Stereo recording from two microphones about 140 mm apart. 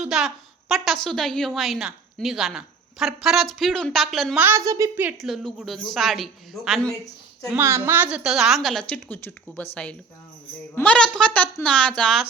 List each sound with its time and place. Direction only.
0.0 s a woman's voice: 5° right (ahead or behind)
4.4 s a woman's voice: 15° right (ahead or behind)
5.1 s a woman's voice: centre (ahead or behind)
7.5 s a woman's voice: 20° right (ahead or behind); by 12.2 s 5° left (ahead or behind)